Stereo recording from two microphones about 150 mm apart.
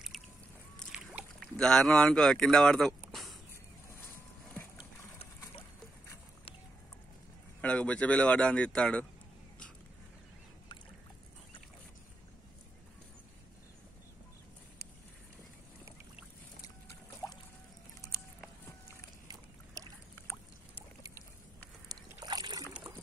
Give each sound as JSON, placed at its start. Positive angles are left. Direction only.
{"t": 0.1, "sound": "boat", "side_deg": 0}
{"t": 0.7, "sound": "a sound", "side_deg": 0}
{"t": 1.4, "sound": "speech", "side_deg": 5}
{"t": 7.6, "sound": "speech", "side_deg": 5}
{"t": 19.2, "sound": "boat", "side_deg": -25}
{"t": 21.8, "sound": "boat", "side_deg": -25}